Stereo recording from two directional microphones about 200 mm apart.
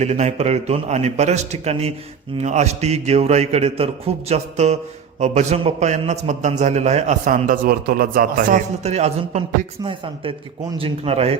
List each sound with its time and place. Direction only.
0.0 s a man's voice: 35° right (ahead or behind)